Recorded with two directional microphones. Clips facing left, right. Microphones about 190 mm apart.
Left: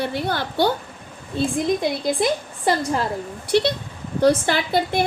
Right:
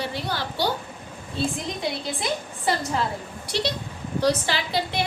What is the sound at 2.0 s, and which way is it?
A woman's voice, 50° left (ahead or behind).